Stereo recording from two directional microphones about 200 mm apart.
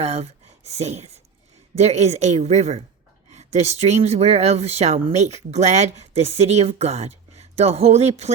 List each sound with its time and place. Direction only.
0.0 s speech: 30° right (ahead or behind)